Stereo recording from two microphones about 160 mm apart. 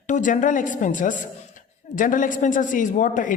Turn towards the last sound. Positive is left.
turn(degrees=55)  # may be behind; listen again after turning